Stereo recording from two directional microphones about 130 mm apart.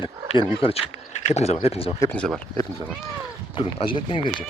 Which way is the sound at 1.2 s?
60° left (ahead or behind).